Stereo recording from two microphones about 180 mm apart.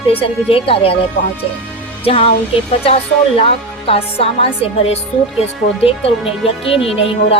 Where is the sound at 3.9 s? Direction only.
30° left (ahead or behind).